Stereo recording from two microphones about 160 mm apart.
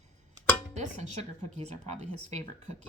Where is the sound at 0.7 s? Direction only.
45° right (ahead or behind).